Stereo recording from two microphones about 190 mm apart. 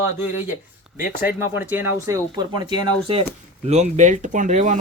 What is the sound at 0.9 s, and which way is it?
Speech, 10° right (ahead or behind).